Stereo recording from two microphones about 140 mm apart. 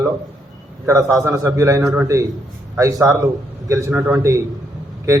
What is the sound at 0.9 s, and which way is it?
Speech, 25° right (ahead or behind).